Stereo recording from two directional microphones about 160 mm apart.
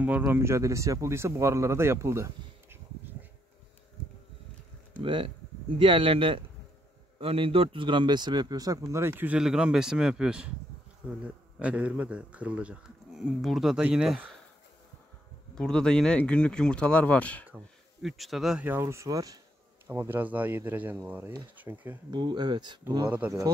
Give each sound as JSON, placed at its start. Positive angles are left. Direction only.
{"t": 0.2, "sound": "speech", "side_deg": -15}
{"t": 4.9, "sound": "speech", "side_deg": -30}
{"t": 11.6, "sound": "speech", "side_deg": -10}
{"t": 15.5, "sound": "speech", "side_deg": 5}
{"t": 22.1, "sound": "speech", "side_deg": -30}
{"t": 23.0, "sound": "speech", "side_deg": -10}